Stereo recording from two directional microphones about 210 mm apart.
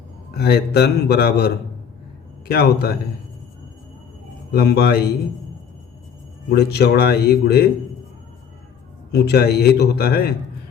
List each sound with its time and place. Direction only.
0.3 s a man's voice: 50° left (ahead or behind)
4.5 s a man's voice: 50° left (ahead or behind)
6.5 s a man's voice: 50° left (ahead or behind)
9.1 s a man's voice: 50° left (ahead or behind)